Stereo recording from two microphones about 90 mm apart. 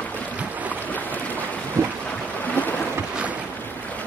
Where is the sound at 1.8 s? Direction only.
30° right (ahead or behind).